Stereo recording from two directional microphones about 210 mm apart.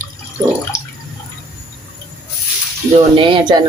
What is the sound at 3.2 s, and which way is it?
Speech, 25° right (ahead or behind).